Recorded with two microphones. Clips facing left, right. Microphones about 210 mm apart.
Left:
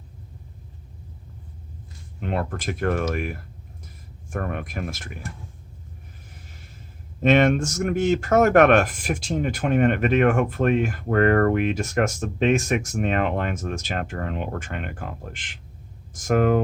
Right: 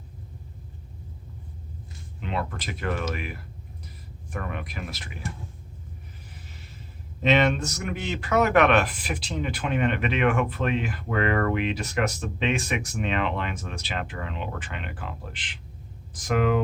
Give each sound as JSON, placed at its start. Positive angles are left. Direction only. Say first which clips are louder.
{"t": 2.2, "sound": "speech", "louder": "left 4 dB", "side_deg": 50}
{"t": 7.2, "sound": "speech", "louder": "left 4 dB", "side_deg": 50}